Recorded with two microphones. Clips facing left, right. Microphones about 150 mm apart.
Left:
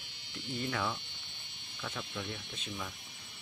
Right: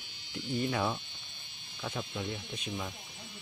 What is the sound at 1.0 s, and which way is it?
Insect, 60° left (ahead or behind).